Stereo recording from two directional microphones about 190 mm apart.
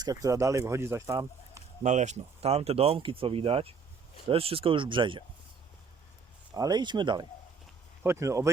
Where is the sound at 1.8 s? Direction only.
40° right (ahead or behind).